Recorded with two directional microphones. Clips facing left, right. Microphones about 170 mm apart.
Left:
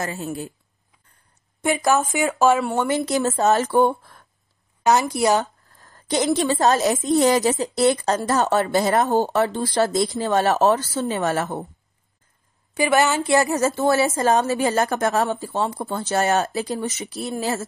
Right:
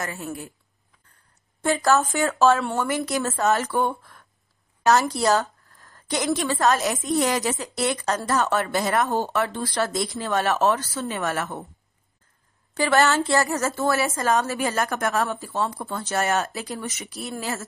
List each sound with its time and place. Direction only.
0.0 s a woman's voice: 25° left (ahead or behind)
1.6 s a woman's voice: 15° left (ahead or behind); by 4.3 s 30° left (ahead or behind)
4.8 s a woman's voice: 15° left (ahead or behind); by 11.6 s 30° left (ahead or behind)
12.7 s a woman's voice: 15° left (ahead or behind); by 17.6 s 30° left (ahead or behind)